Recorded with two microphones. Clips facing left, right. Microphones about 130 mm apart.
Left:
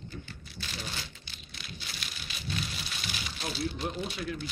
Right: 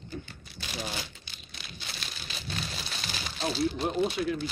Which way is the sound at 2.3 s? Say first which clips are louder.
Left 1 dB; 35° right (ahead or behind).